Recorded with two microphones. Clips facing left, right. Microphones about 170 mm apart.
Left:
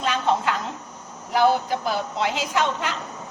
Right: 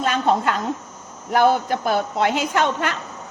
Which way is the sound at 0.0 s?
50° right (ahead or behind).